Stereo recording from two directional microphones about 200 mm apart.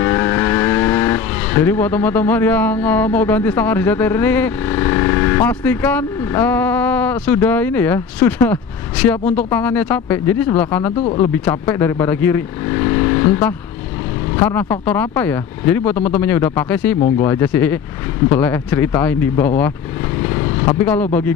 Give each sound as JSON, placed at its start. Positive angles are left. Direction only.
{"t": 0.0, "sound": "speech", "side_deg": 15}
{"t": 20.3, "sound": "vehicle", "side_deg": 20}
{"t": 20.8, "sound": "speech", "side_deg": 10}